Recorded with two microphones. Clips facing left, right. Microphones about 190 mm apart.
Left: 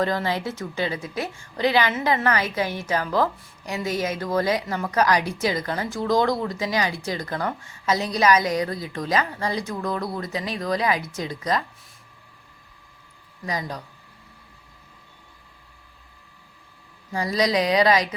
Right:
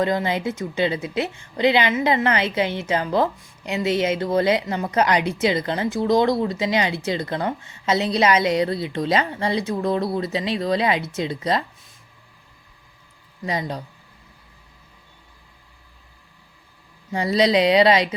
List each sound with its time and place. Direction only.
0.0 s a woman's voice: 20° right (ahead or behind)
13.4 s a woman's voice: 25° right (ahead or behind)
17.1 s a woman's voice: 25° right (ahead or behind)